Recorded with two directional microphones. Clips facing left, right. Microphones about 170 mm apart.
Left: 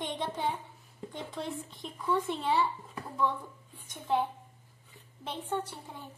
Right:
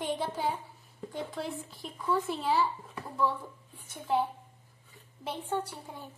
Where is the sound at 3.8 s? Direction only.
10° right (ahead or behind).